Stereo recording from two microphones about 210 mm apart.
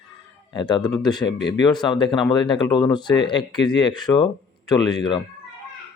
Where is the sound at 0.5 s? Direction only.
20° left (ahead or behind).